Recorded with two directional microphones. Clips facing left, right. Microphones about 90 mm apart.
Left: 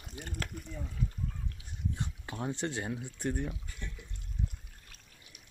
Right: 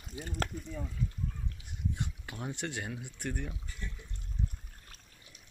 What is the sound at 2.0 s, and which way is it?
Speech, 30° left (ahead or behind).